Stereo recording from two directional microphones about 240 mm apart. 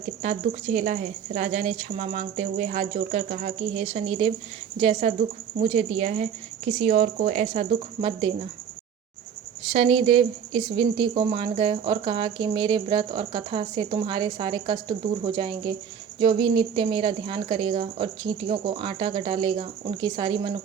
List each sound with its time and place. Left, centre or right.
0.2 s speech: right
9.7 s speech: right